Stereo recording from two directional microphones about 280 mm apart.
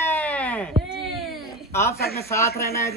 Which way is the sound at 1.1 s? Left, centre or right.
Centre.